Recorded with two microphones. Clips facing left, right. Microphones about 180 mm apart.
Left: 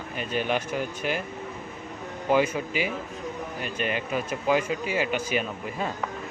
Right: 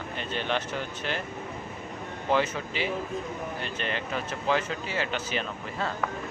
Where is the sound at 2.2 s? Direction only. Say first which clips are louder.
Left 3 dB; 10° left (ahead or behind).